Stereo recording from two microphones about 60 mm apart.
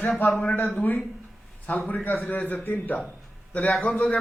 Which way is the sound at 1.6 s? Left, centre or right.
Left.